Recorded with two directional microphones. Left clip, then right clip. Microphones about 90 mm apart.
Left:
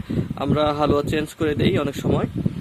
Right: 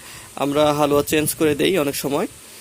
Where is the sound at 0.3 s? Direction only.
30° right (ahead or behind).